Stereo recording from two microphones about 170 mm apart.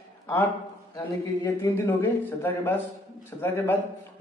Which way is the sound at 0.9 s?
15° left (ahead or behind).